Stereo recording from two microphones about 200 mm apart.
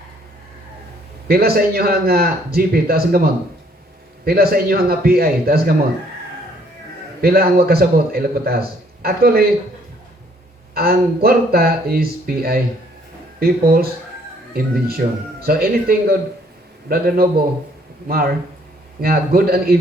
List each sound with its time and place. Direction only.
1.3 s speech: 50° right (ahead or behind)
4.3 s speech: 50° right (ahead or behind)
7.2 s speech: 50° right (ahead or behind)
10.8 s speech: 50° right (ahead or behind)